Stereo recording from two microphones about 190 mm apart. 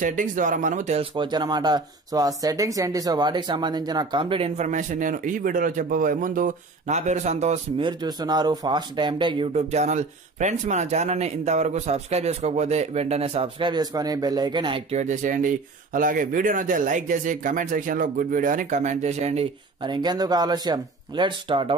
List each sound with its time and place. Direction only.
0.0 s speech: 40° right (ahead or behind)
1.1 s speech: 25° right (ahead or behind)
8.0 s speech: 20° right (ahead or behind)
19.8 s speech: 20° right (ahead or behind)